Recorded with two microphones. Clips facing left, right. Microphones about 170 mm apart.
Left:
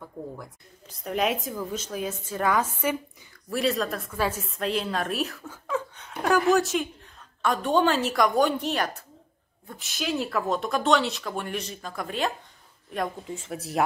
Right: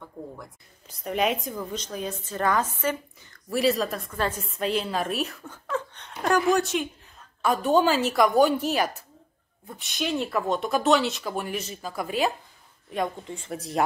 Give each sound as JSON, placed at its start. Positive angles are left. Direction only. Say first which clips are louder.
{"t": 0.0, "sound": "speech", "louder": "left 2 dB", "side_deg": 0}
{"t": 3.4, "sound": "speech", "louder": "right 2 dB", "side_deg": 0}